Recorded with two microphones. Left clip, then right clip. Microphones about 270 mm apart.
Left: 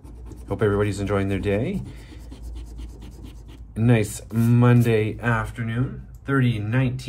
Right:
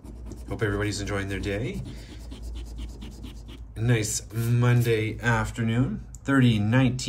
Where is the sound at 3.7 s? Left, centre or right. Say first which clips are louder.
Left 5 dB; left.